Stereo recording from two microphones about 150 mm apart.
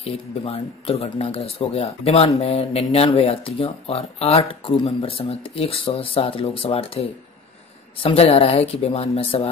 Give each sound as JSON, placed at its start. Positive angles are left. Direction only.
{"t": 0.0, "sound": "speech", "side_deg": 45}